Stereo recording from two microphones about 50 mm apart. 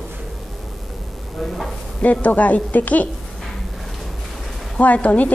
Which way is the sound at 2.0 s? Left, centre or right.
Left.